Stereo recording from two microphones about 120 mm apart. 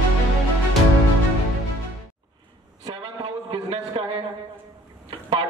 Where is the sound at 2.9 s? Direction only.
40° right (ahead or behind).